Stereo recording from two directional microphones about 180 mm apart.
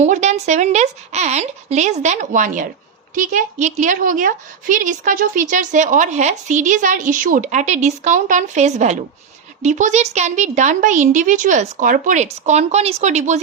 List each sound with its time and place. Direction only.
0.0 s a woman's voice: 40° right (ahead or behind)